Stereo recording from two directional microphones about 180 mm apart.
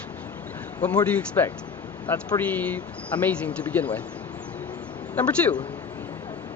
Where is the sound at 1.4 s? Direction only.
10° left (ahead or behind).